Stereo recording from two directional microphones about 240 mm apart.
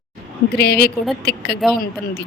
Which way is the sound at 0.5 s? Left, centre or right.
Left.